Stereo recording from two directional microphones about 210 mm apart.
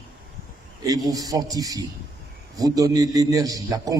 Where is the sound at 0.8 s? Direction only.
15° right (ahead or behind).